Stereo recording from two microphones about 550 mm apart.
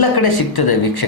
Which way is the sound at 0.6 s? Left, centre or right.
Left.